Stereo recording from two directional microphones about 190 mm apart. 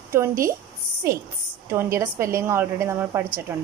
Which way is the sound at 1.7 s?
15° right (ahead or behind).